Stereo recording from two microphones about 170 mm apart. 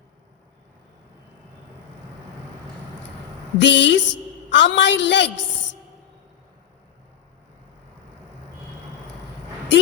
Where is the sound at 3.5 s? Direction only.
90° left.